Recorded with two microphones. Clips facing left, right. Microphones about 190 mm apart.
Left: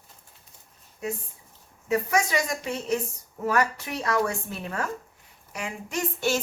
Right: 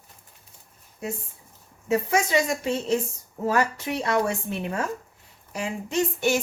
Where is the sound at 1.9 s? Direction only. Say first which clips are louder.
Right 2 dB; 25° right (ahead or behind).